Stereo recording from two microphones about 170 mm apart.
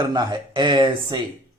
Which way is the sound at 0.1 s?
25° right (ahead or behind).